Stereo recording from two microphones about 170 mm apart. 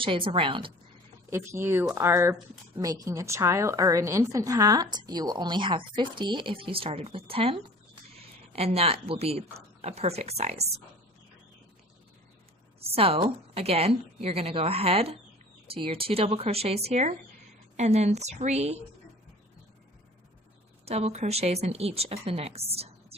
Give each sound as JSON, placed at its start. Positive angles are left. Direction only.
{"t": 0.0, "sound": "a woman's voice", "side_deg": -30}
{"t": 1.3, "sound": "a woman's voice", "side_deg": -15}
{"t": 12.8, "sound": "a woman's voice", "side_deg": -35}
{"t": 20.8, "sound": "a woman's voice", "side_deg": -40}